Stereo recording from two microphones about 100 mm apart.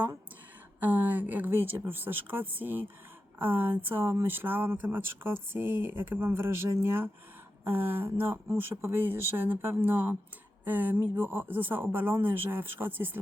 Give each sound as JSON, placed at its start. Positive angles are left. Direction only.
{"t": 0.8, "sound": "speech", "side_deg": -15}